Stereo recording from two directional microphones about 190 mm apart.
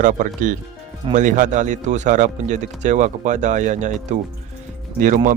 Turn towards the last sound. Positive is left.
turn(degrees=-40)  # may be behind; listen again after turning